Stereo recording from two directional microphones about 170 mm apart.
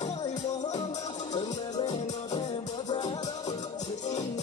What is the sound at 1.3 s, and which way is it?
Music, 30° left (ahead or behind).